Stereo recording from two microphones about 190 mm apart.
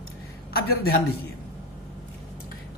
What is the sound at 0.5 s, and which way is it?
Speech, 55° left (ahead or behind).